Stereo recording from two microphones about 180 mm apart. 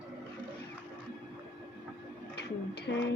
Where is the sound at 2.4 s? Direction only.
70° left (ahead or behind).